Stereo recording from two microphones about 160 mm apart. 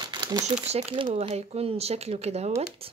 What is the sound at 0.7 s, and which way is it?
Speech, 40° right (ahead or behind).